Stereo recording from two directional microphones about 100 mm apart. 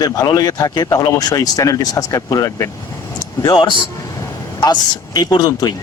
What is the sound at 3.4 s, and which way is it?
Speech, 50° left (ahead or behind).